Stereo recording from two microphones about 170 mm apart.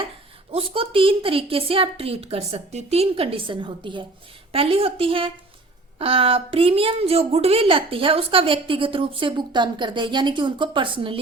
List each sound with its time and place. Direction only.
0.5 s a woman's voice: 35° right (ahead or behind)